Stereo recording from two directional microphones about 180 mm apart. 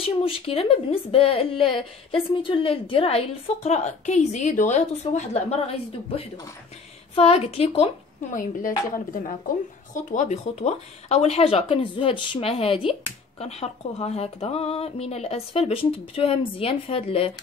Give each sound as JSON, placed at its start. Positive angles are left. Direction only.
{"t": 0.0, "sound": "a woman's voice", "side_deg": 30}
{"t": 7.2, "sound": "a woman's voice", "side_deg": 35}
{"t": 8.4, "sound": "a woman's voice", "side_deg": 50}